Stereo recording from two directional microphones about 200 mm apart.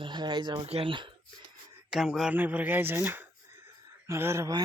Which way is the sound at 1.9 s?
Centre (ahead or behind).